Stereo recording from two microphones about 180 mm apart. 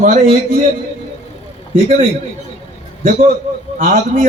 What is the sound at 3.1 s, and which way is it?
A man's voice, 50° right (ahead or behind).